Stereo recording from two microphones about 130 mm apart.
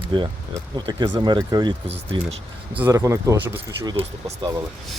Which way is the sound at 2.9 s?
25° right (ahead or behind).